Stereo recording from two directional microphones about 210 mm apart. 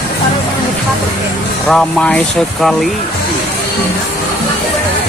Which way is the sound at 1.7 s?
5° left (ahead or behind).